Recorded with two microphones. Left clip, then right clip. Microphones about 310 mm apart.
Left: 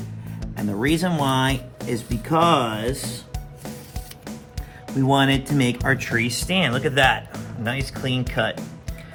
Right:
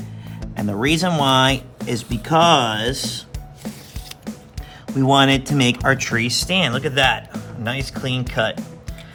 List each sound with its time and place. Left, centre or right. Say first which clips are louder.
0.0 s music: right 1 dB; centre
0.7 s speech: right 3 dB; right
1.8 s speech: right 2 dB; centre
2.2 s speech: right 4 dB; right
4.9 s speech: right 4 dB; right; by 8.7 s centre